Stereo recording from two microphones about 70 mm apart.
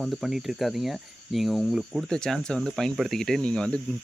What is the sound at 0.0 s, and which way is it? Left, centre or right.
Cricket, centre.